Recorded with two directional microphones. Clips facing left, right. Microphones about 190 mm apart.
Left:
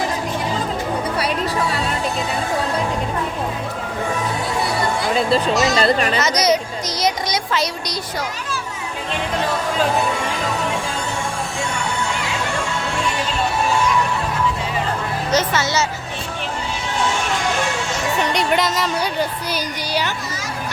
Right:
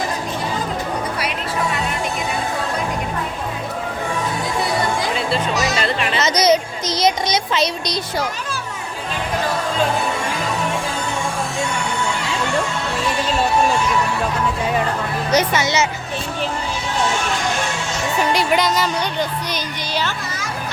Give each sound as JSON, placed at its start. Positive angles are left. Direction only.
{"t": 5.7, "sound": "speech", "side_deg": 40}
{"t": 6.1, "sound": "a sound", "side_deg": -25}
{"t": 15.3, "sound": "speech", "side_deg": -15}
{"t": 18.2, "sound": "speech", "side_deg": -5}